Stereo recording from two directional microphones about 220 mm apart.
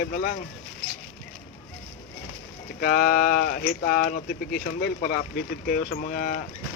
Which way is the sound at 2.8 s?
40° left (ahead or behind).